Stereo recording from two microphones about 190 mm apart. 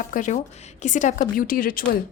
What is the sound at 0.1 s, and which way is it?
A woman's voice, 40° left (ahead or behind).